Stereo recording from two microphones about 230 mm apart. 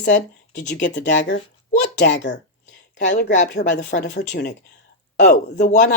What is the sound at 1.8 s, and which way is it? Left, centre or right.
Speech, left.